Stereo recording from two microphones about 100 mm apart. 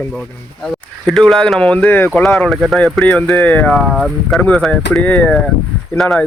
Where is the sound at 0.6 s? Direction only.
5° left (ahead or behind).